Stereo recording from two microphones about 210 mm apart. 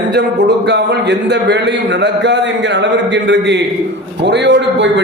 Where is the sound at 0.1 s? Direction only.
55° right (ahead or behind).